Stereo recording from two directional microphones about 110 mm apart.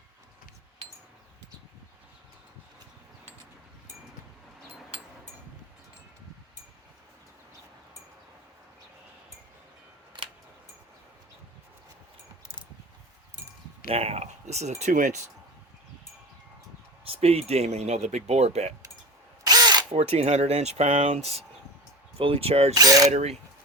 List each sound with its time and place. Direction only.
13.9 s speech: 65° right (ahead or behind); by 14.8 s 90° right
17.0 s speech: 60° right (ahead or behind); by 18.7 s 80° right
19.5 s ratchet: 35° right (ahead or behind)
19.9 s speech: 70° right (ahead or behind)
22.2 s speech: 60° right (ahead or behind)
22.7 s mechanisms: 35° right (ahead or behind)
23.0 s speech: 80° right